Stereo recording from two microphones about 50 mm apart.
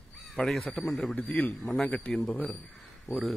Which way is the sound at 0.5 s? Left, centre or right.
Centre.